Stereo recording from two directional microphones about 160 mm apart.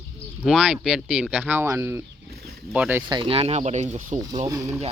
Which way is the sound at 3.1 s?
35° right (ahead or behind).